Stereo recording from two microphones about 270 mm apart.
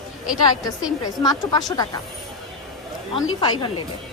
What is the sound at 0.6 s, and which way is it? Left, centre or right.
A woman's voice, centre.